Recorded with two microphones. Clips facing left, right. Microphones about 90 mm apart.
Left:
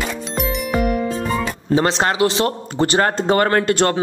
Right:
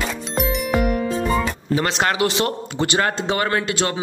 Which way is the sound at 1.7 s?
30° left (ahead or behind).